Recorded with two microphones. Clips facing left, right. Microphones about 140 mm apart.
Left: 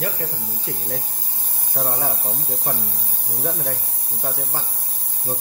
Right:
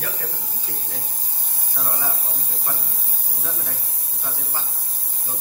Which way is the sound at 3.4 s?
60° left (ahead or behind).